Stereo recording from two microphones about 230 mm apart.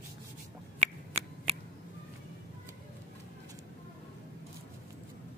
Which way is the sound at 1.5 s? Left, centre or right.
Right.